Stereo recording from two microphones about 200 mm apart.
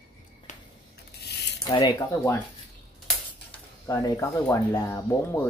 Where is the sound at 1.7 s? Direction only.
20° left (ahead or behind).